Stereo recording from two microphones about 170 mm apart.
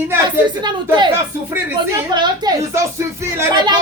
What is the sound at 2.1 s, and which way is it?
Speech, 25° right (ahead or behind).